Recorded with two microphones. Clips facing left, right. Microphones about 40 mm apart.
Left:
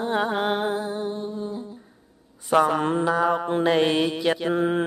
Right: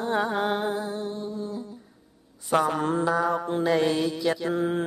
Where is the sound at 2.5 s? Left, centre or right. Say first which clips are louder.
Left 4 dB; left.